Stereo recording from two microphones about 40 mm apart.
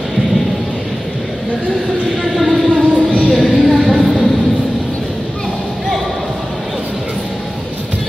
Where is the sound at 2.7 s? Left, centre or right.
Right.